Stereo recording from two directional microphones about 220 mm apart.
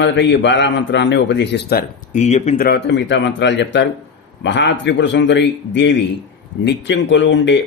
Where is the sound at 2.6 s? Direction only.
50° left (ahead or behind).